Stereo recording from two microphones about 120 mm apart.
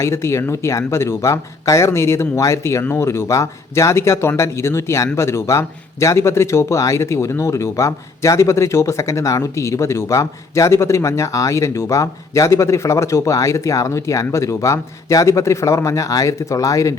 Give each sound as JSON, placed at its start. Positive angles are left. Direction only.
{"t": 0.0, "sound": "a man's voice", "side_deg": 20}